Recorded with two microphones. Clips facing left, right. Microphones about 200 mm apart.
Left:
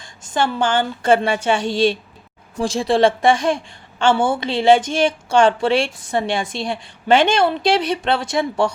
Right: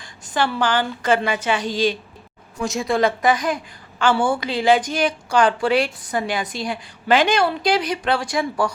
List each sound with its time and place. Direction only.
0.0 s a woman's voice: 25° left (ahead or behind)